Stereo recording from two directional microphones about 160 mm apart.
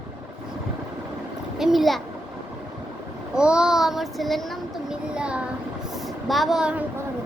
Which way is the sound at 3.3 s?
5° right (ahead or behind).